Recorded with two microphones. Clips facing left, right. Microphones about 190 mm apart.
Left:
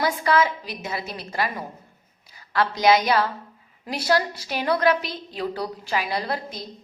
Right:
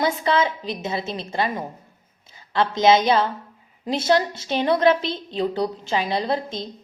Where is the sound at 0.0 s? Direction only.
25° right (ahead or behind).